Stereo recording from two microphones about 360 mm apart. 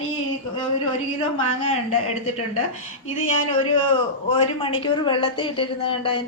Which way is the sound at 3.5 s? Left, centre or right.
Centre.